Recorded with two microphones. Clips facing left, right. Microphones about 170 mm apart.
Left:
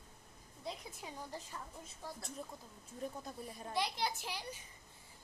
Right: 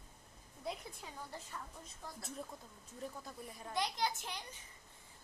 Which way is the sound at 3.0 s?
20° left (ahead or behind).